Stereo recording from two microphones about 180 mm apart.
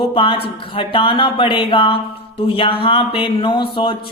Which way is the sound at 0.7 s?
30° left (ahead or behind).